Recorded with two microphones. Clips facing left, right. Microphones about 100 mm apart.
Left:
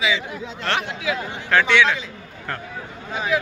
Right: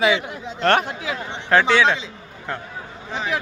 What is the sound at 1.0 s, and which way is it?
A man's voice, 35° right (ahead or behind).